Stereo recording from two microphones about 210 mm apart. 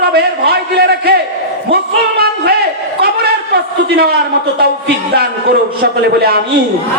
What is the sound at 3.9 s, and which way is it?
Speech, 50° right (ahead or behind).